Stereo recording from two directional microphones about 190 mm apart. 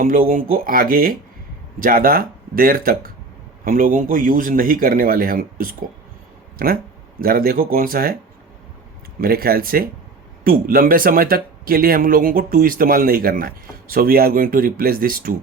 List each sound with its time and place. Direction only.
0.0 s speech: 45° right (ahead or behind)
9.2 s speech: 50° right (ahead or behind)